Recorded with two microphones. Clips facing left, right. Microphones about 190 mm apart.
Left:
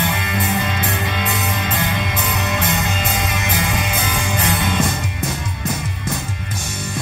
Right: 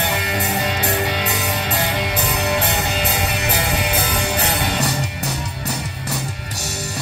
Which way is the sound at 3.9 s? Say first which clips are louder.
Right 1 dB; 40° right (ahead or behind).